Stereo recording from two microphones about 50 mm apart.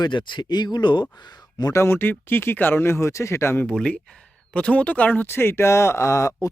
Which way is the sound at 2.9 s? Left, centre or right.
Left.